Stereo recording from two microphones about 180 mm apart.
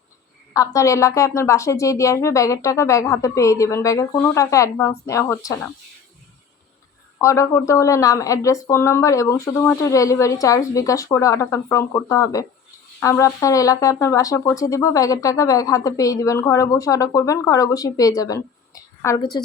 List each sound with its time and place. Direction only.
0.5 s speech: 20° left (ahead or behind)
7.2 s speech: 15° left (ahead or behind)